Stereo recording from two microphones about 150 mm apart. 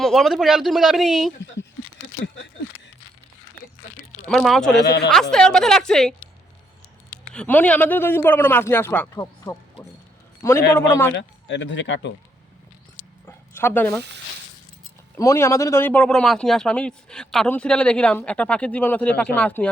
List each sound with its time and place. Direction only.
0.0 s speech: centre (ahead or behind)
4.3 s speech: centre (ahead or behind)
7.3 s a man's voice: 10° left (ahead or behind)
13.2 s a sound: 15° left (ahead or behind)
15.1 s a man's voice: 20° left (ahead or behind)